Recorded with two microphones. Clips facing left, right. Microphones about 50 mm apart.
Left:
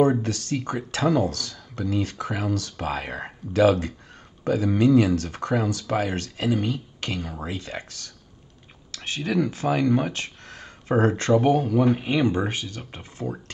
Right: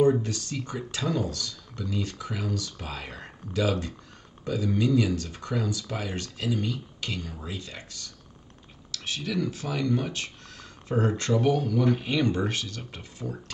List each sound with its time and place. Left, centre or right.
0.0 s speech: left
8.9 s speech: left
11.3 s speech: left